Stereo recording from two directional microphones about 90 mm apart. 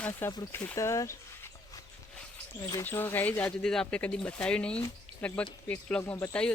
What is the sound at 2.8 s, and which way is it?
Speech, 25° left (ahead or behind).